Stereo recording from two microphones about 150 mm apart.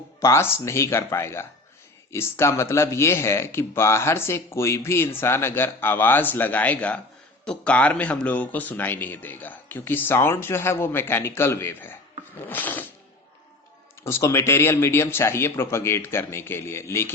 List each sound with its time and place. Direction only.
0.2 s speech: 15° left (ahead or behind)
14.0 s speech: 20° left (ahead or behind)